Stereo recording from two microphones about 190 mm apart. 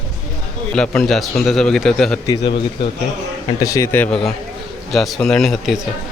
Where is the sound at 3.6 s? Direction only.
15° left (ahead or behind).